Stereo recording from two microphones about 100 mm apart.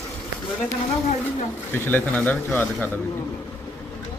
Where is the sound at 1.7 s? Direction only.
20° left (ahead or behind).